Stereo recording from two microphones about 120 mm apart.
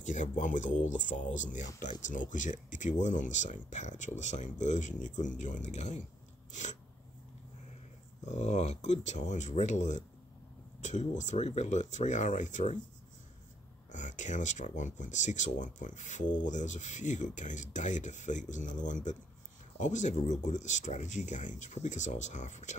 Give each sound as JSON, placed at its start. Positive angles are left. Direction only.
{"t": 0.0, "sound": "speech", "side_deg": 90}
{"t": 6.5, "sound": "speech", "side_deg": 90}
{"t": 8.4, "sound": "speech", "side_deg": 70}
{"t": 13.9, "sound": "speech", "side_deg": 90}